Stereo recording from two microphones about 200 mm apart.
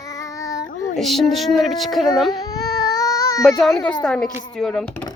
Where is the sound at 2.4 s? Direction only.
20° left (ahead or behind).